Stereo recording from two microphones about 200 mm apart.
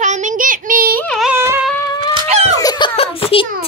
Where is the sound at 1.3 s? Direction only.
10° right (ahead or behind).